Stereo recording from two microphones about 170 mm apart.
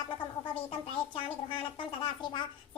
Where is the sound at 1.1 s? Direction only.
30° left (ahead or behind).